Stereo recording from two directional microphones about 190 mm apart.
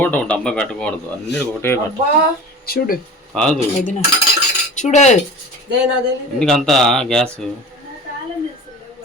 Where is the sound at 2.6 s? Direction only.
55° left (ahead or behind).